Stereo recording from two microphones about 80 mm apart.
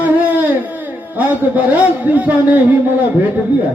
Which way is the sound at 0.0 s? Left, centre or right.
Right.